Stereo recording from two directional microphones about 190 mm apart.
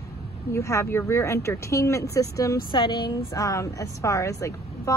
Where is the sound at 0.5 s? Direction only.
15° left (ahead or behind).